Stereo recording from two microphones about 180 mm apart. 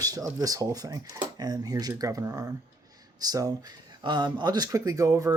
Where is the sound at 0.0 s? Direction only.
20° right (ahead or behind).